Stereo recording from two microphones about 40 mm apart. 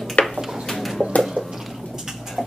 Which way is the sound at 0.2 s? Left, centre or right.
Left.